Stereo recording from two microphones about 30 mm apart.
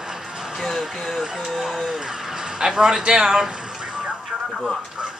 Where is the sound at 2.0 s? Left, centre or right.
Centre.